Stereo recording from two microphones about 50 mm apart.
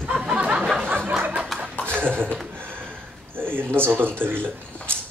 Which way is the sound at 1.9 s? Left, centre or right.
Right.